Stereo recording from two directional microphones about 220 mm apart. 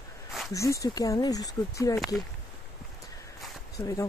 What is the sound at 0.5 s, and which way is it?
Speech, 15° left (ahead or behind).